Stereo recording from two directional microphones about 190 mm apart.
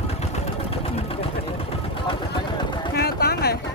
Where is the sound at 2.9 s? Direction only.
55° left (ahead or behind).